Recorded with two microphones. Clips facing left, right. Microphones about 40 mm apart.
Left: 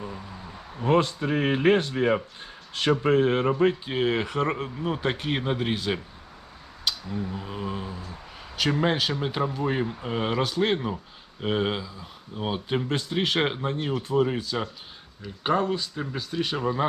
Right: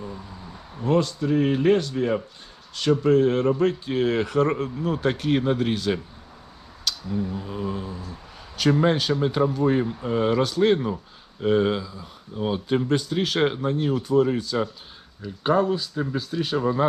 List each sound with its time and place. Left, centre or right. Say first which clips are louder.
0.8 s speech: even; left
7.1 s speech: right 4 dB; centre
7.3 s speech: right 3 dB; left; by 16.6 s centre